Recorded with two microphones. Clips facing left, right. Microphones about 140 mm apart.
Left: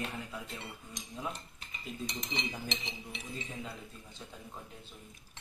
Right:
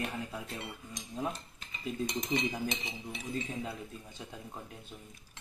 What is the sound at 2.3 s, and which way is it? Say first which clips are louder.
Speech: right 7 dB; 50° right (ahead or behind).